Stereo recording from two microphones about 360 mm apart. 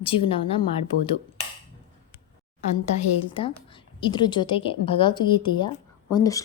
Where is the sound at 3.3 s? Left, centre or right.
Centre.